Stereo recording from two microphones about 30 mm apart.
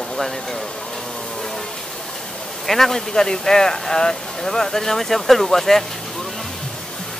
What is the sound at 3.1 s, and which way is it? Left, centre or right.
Speech, left.